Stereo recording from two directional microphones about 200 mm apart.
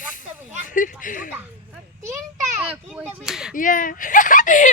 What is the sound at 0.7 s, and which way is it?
Speech, 40° left (ahead or behind).